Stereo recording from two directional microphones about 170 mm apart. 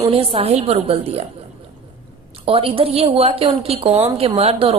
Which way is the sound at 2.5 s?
35° right (ahead or behind).